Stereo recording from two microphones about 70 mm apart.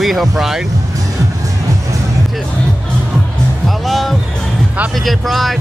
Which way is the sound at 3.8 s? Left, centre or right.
Centre.